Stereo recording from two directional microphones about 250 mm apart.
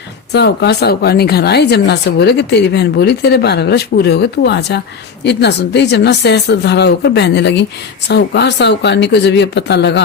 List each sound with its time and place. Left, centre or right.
0.3 s speech: left